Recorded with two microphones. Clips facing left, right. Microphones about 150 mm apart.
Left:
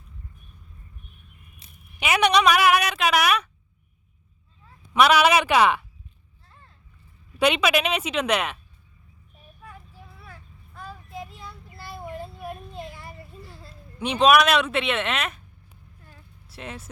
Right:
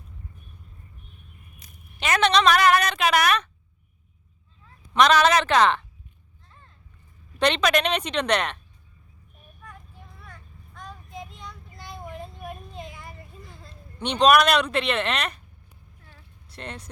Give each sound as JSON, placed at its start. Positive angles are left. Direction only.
{"t": 1.6, "sound": "a sound", "side_deg": 25}
{"t": 2.0, "sound": "a sound", "side_deg": 10}
{"t": 4.9, "sound": "speech", "side_deg": 10}
{"t": 7.3, "sound": "a woman's voice", "side_deg": 5}
{"t": 9.6, "sound": "child singing", "side_deg": 5}
{"t": 16.1, "sound": "vehicle", "side_deg": 5}